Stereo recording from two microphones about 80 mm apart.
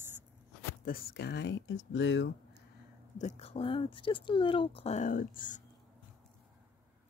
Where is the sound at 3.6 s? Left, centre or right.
Left.